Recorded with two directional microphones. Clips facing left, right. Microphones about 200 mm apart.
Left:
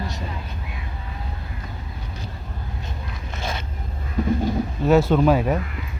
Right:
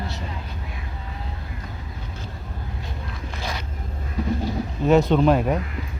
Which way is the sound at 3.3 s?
25° left (ahead or behind).